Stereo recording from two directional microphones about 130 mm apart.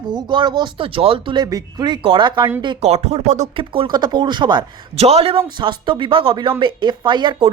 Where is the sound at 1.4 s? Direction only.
30° right (ahead or behind).